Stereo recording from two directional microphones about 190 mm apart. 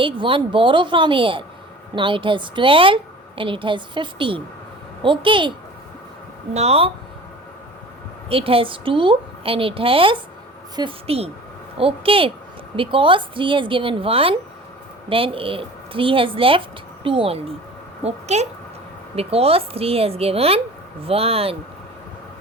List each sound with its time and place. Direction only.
0.0 s a woman's voice: 25° right (ahead or behind)
8.3 s a woman's voice: 30° right (ahead or behind)